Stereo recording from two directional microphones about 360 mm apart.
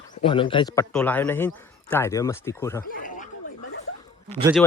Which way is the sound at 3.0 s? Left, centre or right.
Left.